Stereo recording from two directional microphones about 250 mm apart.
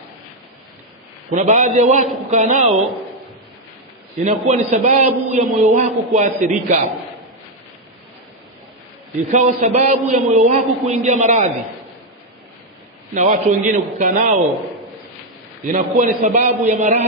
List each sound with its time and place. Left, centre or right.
1.3 s a man's voice: right
4.2 s a man's voice: right
9.3 s a man's voice: right
13.1 s a man's voice: right
15.6 s a man's voice: right